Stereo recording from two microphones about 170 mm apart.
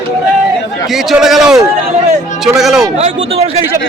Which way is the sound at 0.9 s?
Centre (ahead or behind).